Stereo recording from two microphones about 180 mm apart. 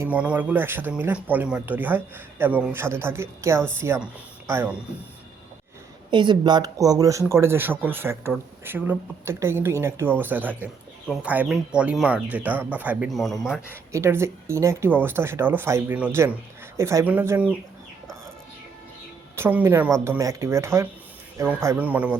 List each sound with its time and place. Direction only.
0.0 s speech: 5° right (ahead or behind)
6.1 s speech: 25° right (ahead or behind); by 13.7 s centre (ahead or behind)
13.9 s speech: 15° right (ahead or behind)
19.4 s speech: 10° right (ahead or behind)